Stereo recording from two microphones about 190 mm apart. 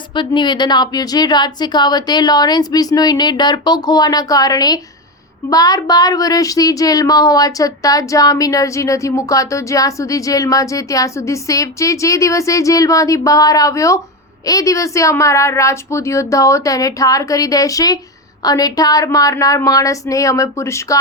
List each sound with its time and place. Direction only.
0.1 s a woman's voice: 25° left (ahead or behind)